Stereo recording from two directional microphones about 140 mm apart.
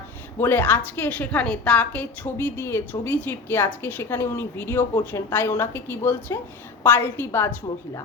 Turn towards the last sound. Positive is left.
turn(degrees=15)  # may be behind; listen again after turning